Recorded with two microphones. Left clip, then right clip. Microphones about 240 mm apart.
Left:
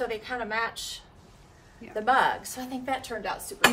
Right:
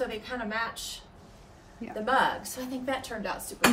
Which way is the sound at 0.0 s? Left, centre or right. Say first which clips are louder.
Left 2 dB; left.